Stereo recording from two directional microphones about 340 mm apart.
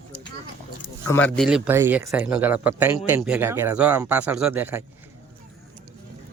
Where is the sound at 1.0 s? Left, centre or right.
Centre.